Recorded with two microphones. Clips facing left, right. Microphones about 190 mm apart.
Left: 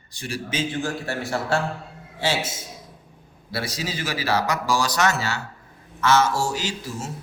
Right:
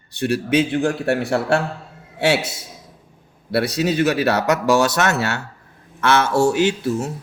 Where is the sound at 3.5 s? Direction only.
65° right (ahead or behind).